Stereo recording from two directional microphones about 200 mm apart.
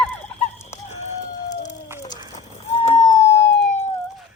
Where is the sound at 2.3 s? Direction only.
35° left (ahead or behind).